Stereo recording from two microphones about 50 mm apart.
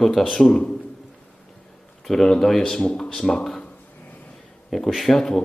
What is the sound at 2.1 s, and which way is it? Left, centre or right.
Speech, centre.